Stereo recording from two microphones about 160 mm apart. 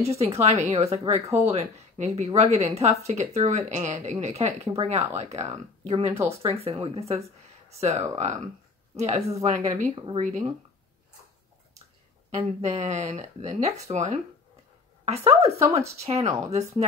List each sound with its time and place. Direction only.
0.0 s speech: 40° right (ahead or behind)
12.3 s speech: 45° right (ahead or behind)